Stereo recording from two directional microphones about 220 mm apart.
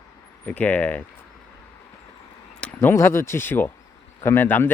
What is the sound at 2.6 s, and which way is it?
Speech, 5° left (ahead or behind).